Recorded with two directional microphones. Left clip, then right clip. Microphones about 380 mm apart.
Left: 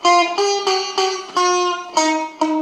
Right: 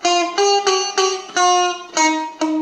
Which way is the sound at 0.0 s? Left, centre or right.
Right.